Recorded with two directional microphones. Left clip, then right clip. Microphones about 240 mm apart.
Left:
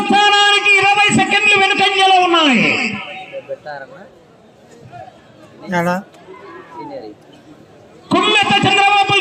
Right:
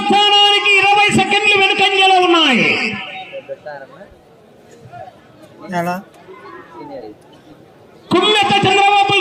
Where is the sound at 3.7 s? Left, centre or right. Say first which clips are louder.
Left 1 dB; left.